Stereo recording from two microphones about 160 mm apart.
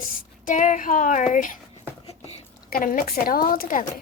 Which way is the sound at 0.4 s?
55° left (ahead or behind).